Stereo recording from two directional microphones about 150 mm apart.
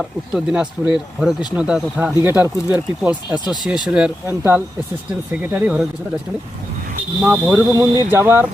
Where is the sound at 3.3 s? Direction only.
30° left (ahead or behind).